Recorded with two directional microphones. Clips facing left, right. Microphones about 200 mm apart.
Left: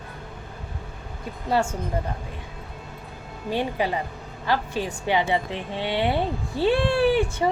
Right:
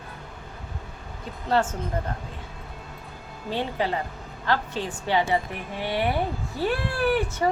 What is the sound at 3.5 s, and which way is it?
A woman's voice, 15° left (ahead or behind).